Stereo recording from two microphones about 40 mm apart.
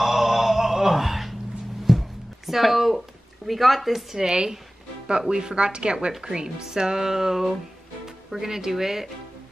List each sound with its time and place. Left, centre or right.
0.0 s mantra: centre
1.9 s music: centre
3.4 s speech: centre
4.2 s a woman's voice: centre